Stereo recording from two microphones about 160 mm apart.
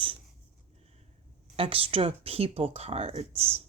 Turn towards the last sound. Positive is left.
turn(degrees=-35)  # may be behind; listen again after turning